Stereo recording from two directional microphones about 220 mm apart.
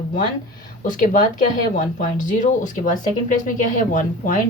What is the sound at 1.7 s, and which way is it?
Speech, 35° left (ahead or behind).